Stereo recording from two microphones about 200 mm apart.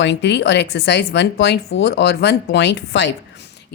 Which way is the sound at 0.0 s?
60° left (ahead or behind).